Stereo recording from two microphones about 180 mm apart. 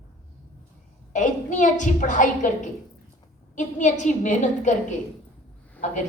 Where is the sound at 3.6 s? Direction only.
45° left (ahead or behind).